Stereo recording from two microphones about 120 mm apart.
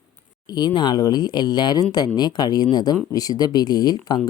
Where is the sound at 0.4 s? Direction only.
35° left (ahead or behind).